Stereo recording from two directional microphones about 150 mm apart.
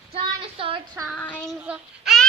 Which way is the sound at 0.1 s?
35° right (ahead or behind).